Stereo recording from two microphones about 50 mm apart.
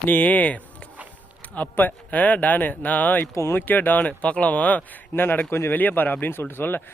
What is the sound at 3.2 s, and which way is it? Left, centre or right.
Speech, left.